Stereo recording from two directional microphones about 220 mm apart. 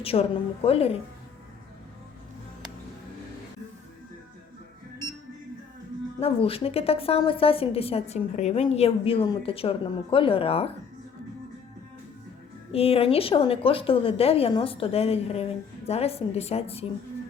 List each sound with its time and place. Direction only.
0.0 s a woman's voice: 25° left (ahead or behind)
6.1 s a woman's voice: 25° left (ahead or behind)
12.7 s a woman's voice: 25° left (ahead or behind)